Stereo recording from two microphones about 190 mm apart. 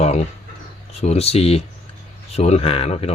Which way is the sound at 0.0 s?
35° left (ahead or behind).